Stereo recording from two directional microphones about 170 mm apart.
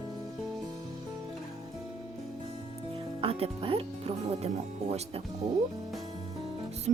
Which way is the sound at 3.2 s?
35° right (ahead or behind).